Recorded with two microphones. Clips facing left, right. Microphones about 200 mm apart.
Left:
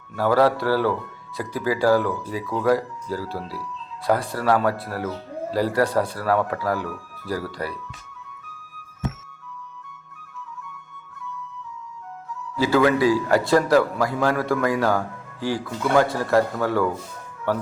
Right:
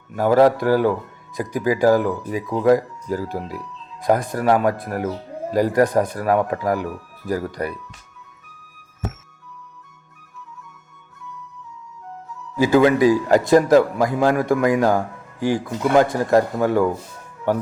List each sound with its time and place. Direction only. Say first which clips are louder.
0.1 s a man's voice: right 4 dB; 15° right (ahead or behind)
12.5 s a man's voice: right 4 dB; 15° right (ahead or behind)